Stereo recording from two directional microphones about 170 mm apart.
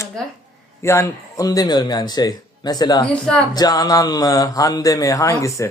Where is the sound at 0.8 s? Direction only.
15° left (ahead or behind).